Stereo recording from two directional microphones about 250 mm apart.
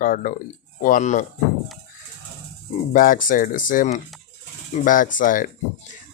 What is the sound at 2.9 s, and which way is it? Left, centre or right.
Speech, left.